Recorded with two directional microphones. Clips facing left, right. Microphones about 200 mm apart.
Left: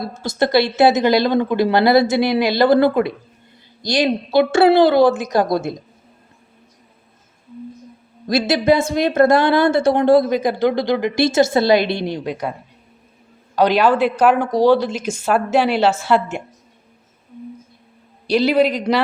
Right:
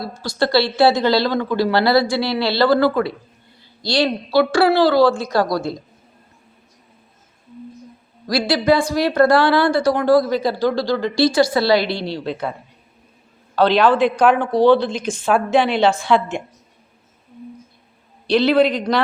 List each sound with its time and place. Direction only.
0.0 s speech: 20° left (ahead or behind)
8.3 s speech: 20° left (ahead or behind)
13.6 s a woman's voice: 10° left (ahead or behind)
18.3 s a woman's voice: 10° left (ahead or behind)